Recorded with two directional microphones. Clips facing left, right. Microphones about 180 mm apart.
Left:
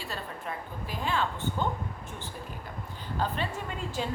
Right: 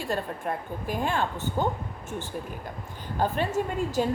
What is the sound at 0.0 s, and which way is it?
A woman's voice, 50° right (ahead or behind).